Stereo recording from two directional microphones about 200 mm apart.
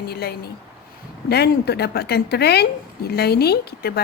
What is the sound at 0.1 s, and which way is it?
A woman's voice, 50° left (ahead or behind).